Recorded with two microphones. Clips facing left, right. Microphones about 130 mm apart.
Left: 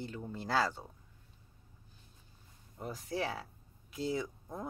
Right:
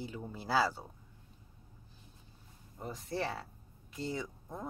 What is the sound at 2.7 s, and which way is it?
Speech, centre (ahead or behind).